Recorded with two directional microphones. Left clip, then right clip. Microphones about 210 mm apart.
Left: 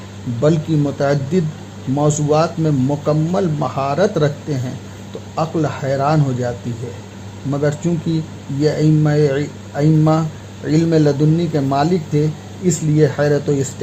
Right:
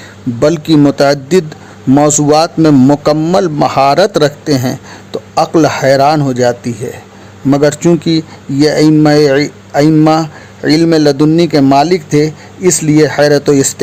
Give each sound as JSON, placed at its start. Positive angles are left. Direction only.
{"t": 0.4, "sound": "a man's voice", "side_deg": -45}
{"t": 7.5, "sound": "speech", "side_deg": -40}